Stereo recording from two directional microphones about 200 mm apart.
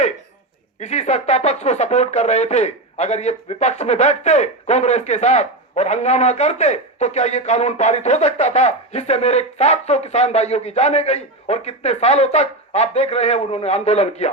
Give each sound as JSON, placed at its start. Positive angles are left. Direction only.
{"t": 0.8, "sound": "speech", "side_deg": 35}